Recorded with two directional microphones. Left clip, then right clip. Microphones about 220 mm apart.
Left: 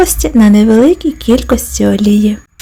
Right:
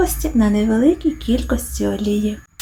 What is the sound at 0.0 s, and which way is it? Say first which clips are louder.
Speech: left 8 dB; 45° left (ahead or behind).